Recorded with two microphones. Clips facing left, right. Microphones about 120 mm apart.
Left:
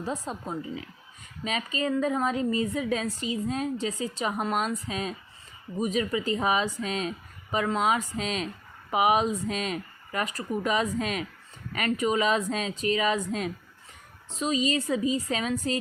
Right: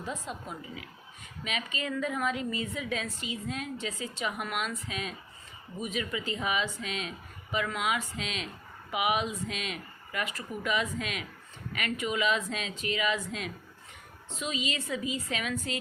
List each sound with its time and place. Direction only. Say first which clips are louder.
0.0 s a woman's voice: left 5 dB; 35° left (ahead or behind)